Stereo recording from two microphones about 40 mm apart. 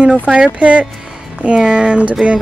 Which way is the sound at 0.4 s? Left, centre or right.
Right.